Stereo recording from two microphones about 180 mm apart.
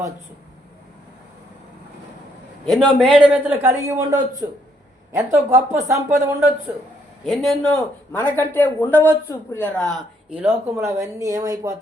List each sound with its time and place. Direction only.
2.6 s speech: centre (ahead or behind)
7.3 s a man's voice: centre (ahead or behind); by 11.8 s 20° right (ahead or behind)